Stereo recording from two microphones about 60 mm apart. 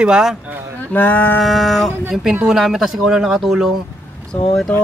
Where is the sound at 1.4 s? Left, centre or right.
Centre.